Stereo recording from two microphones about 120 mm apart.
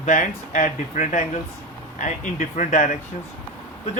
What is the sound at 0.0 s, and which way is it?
Speech, 90° left.